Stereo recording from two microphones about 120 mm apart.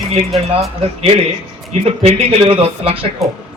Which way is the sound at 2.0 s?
55° right (ahead or behind).